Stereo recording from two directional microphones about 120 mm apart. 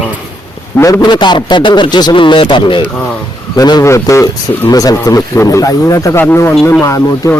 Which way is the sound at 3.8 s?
25° left (ahead or behind).